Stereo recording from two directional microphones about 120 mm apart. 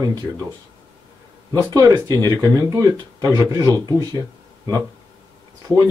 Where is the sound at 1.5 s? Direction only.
30° right (ahead or behind).